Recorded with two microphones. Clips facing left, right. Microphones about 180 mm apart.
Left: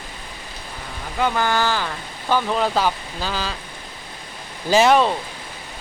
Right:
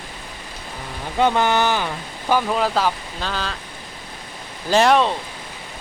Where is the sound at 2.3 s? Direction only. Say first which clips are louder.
Right 1 dB; 5° right (ahead or behind).